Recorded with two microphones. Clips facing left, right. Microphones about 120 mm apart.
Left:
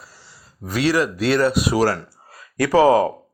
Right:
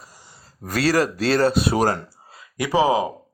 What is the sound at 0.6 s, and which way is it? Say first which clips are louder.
A man's voice: even; 45° right (ahead or behind).